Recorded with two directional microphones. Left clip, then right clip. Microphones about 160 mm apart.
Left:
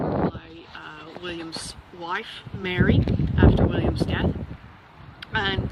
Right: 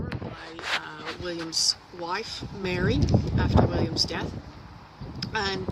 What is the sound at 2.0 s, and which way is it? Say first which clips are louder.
Speech: left 1 dB; 10° right (ahead or behind).